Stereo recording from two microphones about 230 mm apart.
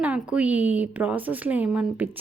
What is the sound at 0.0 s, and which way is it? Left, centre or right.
A woman's voice, centre.